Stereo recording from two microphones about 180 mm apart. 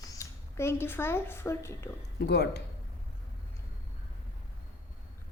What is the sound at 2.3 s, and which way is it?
Speech, 65° left (ahead or behind).